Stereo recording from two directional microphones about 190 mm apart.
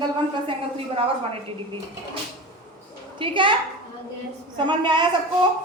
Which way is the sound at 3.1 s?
25° right (ahead or behind).